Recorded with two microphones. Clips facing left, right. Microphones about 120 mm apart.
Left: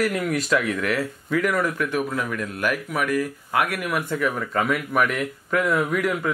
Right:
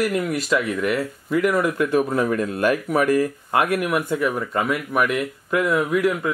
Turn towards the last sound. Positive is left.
turn(degrees=0)  # may be behind; listen again after turning